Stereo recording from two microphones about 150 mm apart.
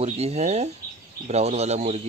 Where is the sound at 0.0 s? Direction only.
45° right (ahead or behind).